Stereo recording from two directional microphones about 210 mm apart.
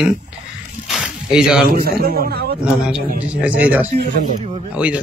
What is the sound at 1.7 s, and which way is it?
Speech, 45° right (ahead or behind).